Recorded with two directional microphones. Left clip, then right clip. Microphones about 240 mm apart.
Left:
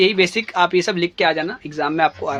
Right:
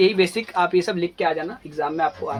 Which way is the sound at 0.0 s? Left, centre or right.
Left.